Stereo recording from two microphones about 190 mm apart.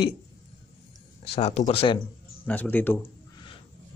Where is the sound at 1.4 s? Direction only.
35° left (ahead or behind).